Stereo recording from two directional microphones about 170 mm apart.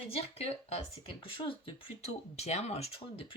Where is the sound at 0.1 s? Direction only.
35° left (ahead or behind).